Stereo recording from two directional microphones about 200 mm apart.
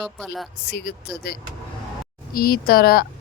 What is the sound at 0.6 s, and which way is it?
Speech, 55° left (ahead or behind).